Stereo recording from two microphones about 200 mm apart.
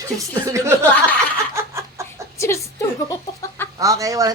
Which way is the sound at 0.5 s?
15° right (ahead or behind).